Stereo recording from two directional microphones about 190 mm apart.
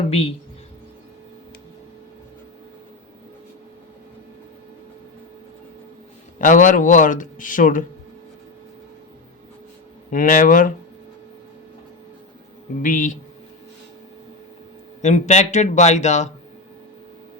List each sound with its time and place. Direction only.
0.1 s speech: 30° left (ahead or behind)
6.4 s speech: 45° left (ahead or behind)
10.1 s speech: 45° left (ahead or behind)
12.8 s speech: 45° left (ahead or behind)
15.0 s speech: 35° left (ahead or behind)